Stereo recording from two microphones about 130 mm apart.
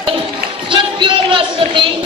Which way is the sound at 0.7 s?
40° right (ahead or behind).